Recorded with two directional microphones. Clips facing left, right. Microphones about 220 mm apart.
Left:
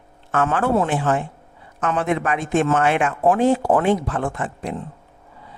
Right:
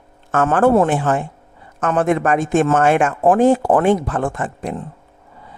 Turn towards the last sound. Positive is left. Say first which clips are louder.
# right 3 dB
turn(degrees=-45)  # may be behind; listen again after turning